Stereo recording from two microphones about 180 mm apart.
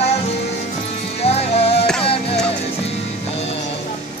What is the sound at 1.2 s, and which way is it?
Music, 35° left (ahead or behind).